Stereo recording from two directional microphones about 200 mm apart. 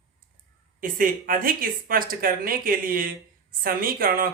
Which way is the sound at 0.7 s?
45° right (ahead or behind).